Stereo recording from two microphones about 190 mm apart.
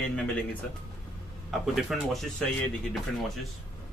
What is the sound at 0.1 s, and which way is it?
Speech, 5° left (ahead or behind).